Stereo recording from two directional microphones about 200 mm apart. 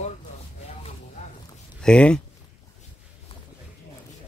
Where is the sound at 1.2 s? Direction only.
35° left (ahead or behind).